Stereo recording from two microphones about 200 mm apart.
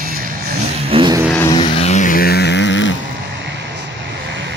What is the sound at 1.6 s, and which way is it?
Music, 30° left (ahead or behind).